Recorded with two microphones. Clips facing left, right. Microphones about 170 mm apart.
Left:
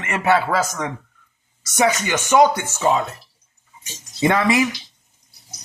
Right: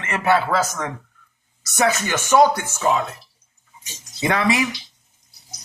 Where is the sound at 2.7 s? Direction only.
30° left (ahead or behind).